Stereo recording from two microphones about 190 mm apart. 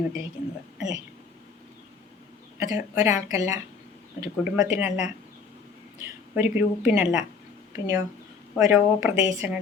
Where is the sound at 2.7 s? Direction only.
10° right (ahead or behind).